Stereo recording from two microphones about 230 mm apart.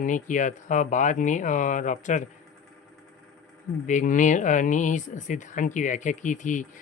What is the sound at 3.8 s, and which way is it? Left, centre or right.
Speech, left.